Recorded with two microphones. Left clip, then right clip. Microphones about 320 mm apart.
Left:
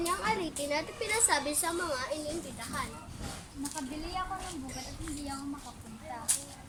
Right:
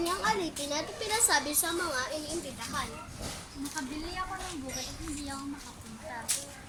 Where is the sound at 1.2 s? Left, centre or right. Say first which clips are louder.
Right 3 dB; centre.